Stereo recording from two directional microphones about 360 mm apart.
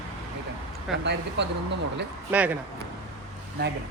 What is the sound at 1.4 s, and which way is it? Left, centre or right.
Speech, right.